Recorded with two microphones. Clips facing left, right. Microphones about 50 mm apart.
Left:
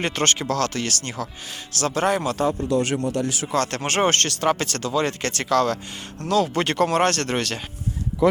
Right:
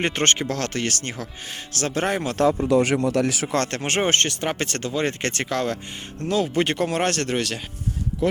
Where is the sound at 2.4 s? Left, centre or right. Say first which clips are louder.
Right 3 dB; right.